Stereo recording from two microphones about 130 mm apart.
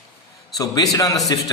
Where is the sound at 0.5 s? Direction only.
30° left (ahead or behind).